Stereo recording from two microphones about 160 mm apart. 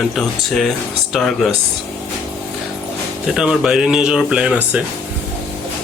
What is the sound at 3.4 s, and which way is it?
Speech, 5° right (ahead or behind).